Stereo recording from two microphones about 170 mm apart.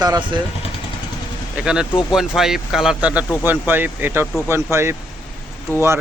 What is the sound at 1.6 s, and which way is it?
Speech, 5° right (ahead or behind).